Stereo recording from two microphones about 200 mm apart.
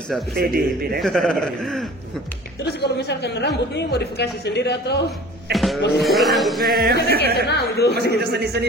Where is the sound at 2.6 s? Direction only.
55° left (ahead or behind).